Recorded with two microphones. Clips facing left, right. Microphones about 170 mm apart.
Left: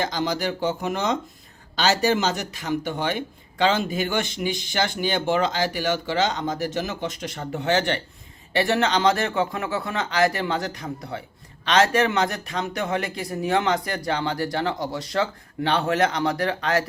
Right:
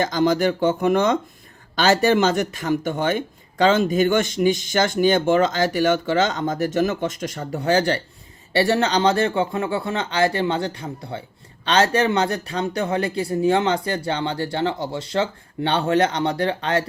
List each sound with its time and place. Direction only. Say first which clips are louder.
0.0 s speech: right 6 dB; 50° right (ahead or behind); by 16.8 s 30° right (ahead or behind)